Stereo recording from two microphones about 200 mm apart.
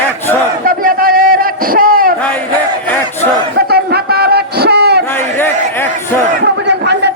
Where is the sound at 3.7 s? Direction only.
50° right (ahead or behind).